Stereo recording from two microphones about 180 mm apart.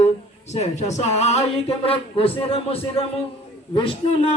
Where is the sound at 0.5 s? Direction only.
40° left (ahead or behind).